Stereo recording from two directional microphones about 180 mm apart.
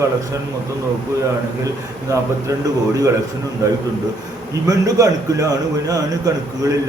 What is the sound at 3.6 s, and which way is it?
A man's voice, 15° right (ahead or behind).